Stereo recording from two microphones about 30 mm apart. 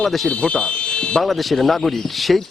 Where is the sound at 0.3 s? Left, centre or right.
Left.